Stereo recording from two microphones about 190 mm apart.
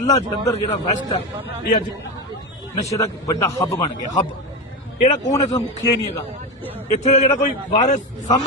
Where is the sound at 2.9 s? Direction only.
15° left (ahead or behind).